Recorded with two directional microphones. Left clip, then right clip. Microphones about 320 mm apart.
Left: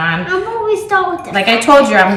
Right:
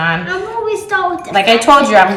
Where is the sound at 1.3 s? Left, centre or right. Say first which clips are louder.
Even; centre.